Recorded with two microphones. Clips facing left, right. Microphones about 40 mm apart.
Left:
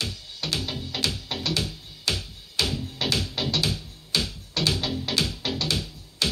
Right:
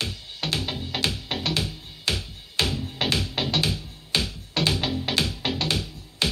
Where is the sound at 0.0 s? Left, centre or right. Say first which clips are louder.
Right 2 dB; right.